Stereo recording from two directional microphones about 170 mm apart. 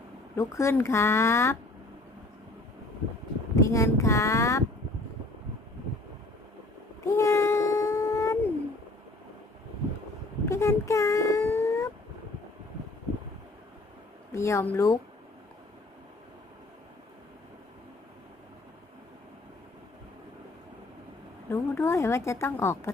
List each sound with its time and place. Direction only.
0.3 s a woman's voice: 15° left (ahead or behind)
3.5 s speech: 20° left (ahead or behind)
7.0 s a sound: 20° left (ahead or behind)
10.4 s speech: 15° left (ahead or behind)
14.3 s a woman's voice: 15° left (ahead or behind)
21.5 s a woman's voice: 15° left (ahead or behind)